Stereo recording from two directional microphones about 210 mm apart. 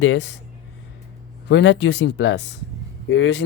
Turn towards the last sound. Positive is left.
turn(degrees=60)  # may be behind; listen again after turning